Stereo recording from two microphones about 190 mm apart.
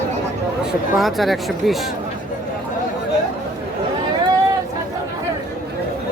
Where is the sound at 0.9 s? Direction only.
Centre (ahead or behind).